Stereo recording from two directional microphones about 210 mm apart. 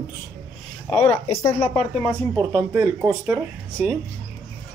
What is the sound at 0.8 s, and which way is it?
Speech, 5° left (ahead or behind).